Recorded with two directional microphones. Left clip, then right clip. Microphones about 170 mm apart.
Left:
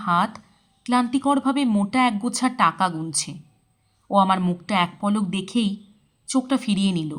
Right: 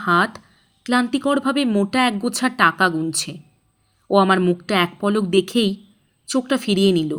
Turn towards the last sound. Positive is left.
turn(degrees=-25)  # may be behind; listen again after turning